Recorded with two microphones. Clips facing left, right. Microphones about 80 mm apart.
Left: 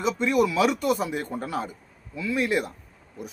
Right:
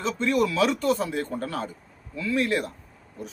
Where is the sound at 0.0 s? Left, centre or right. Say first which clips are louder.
Left 1 dB; centre.